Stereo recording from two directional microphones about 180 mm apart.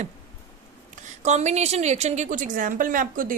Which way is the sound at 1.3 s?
40° right (ahead or behind).